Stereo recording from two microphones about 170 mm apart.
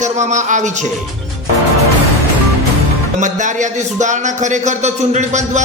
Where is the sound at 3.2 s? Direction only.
45° right (ahead or behind).